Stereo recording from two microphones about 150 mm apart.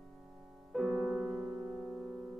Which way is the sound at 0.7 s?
Centre (ahead or behind).